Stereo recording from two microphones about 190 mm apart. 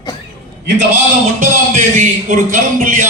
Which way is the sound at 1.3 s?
40° right (ahead or behind).